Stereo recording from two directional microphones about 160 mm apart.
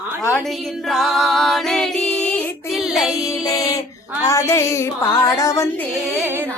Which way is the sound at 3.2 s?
20° left (ahead or behind).